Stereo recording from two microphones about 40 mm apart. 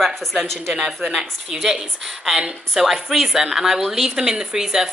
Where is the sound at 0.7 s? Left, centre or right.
Centre.